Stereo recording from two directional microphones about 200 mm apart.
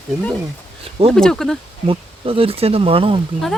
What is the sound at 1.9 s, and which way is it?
Speech, 25° right (ahead or behind).